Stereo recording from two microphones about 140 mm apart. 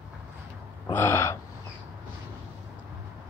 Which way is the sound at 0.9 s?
15° left (ahead or behind).